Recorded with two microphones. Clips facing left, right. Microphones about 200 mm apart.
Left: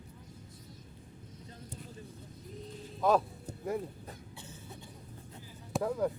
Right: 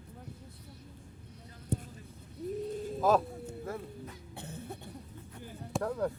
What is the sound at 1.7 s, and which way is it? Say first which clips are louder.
Vehicle: right 14 dB; 60° right (ahead or behind).